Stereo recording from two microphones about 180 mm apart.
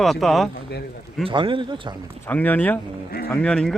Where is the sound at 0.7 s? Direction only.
60° left (ahead or behind).